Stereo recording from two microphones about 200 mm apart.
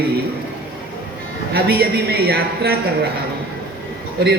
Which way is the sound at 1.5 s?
50° right (ahead or behind).